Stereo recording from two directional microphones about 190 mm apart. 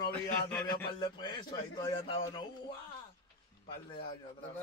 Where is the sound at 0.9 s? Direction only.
25° left (ahead or behind).